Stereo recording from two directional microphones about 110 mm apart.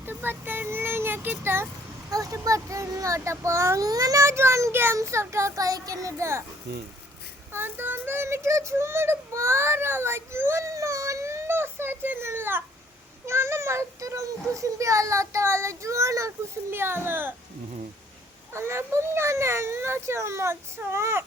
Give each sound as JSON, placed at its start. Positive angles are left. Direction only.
{"t": 0.0, "sound": "a sound", "side_deg": -20}
{"t": 2.0, "sound": "a child's voice", "side_deg": -35}
{"t": 7.5, "sound": "child singing", "side_deg": -20}
{"t": 13.2, "sound": "a child's voice", "side_deg": -25}
{"t": 18.5, "sound": "a child's voice", "side_deg": -25}